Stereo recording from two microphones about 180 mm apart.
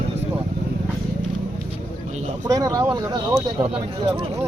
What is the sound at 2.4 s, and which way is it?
Speech, 20° right (ahead or behind).